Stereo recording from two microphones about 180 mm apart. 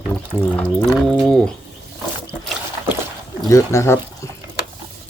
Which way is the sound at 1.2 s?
5° left (ahead or behind).